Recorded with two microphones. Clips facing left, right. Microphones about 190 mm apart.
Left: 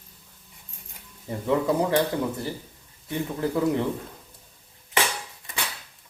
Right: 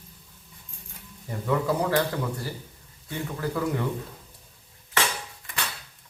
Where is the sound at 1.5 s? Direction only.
25° left (ahead or behind).